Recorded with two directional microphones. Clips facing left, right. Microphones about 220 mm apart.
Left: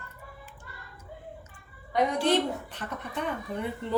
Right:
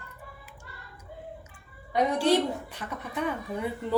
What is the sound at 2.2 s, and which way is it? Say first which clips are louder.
Speech: right 1 dB; 10° right (ahead or behind).